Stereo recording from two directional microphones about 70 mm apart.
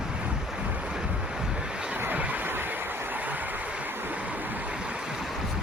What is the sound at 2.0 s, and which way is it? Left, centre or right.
Vehicle, right.